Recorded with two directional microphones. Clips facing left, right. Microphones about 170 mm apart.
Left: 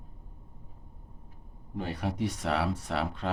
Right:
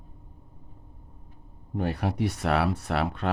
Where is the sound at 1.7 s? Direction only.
60° right (ahead or behind).